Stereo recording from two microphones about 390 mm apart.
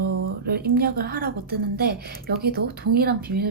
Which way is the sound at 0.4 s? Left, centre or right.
Right.